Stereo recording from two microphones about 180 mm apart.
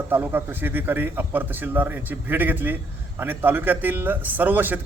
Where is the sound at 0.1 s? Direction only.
10° right (ahead or behind).